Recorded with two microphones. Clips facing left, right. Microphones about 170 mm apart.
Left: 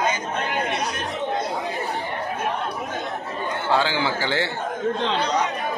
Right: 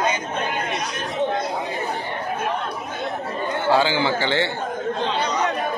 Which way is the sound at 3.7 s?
Centre (ahead or behind).